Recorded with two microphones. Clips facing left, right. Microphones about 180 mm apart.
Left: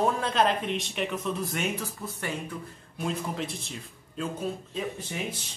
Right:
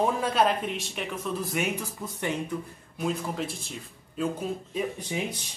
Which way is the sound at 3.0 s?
5° right (ahead or behind).